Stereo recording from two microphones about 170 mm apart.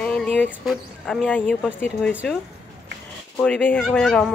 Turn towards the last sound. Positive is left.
turn(degrees=5)  # may be behind; listen again after turning